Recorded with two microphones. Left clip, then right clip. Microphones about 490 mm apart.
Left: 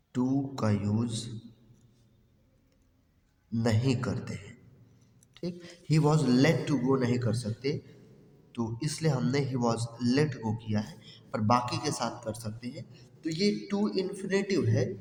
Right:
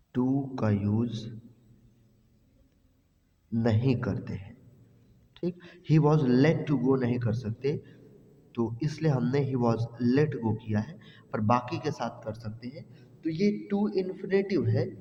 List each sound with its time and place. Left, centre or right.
0.1 s a man's voice: right
3.5 s speech: right